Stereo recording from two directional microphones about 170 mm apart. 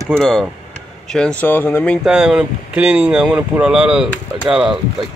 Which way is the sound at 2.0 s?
5° right (ahead or behind).